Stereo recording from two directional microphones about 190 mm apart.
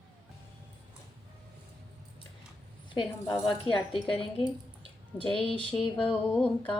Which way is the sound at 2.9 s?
25° left (ahead or behind).